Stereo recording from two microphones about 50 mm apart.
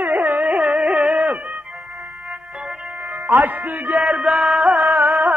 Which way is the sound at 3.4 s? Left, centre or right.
Right.